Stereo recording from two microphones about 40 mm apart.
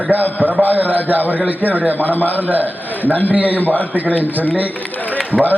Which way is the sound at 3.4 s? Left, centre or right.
Left.